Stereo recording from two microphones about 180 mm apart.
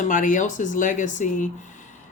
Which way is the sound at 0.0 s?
45° left (ahead or behind).